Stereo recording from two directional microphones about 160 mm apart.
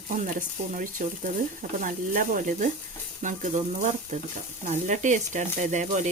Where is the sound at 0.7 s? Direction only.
55° right (ahead or behind).